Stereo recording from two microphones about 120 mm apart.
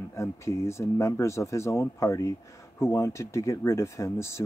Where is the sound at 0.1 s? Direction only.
25° left (ahead or behind).